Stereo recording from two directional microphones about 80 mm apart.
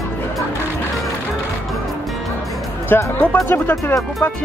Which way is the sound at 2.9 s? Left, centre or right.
Left.